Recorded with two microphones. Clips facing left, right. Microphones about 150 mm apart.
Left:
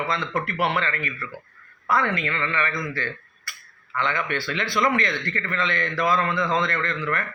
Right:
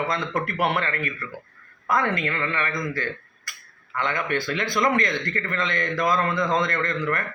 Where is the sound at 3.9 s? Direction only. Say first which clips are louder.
Right 1 dB; 45° right (ahead or behind).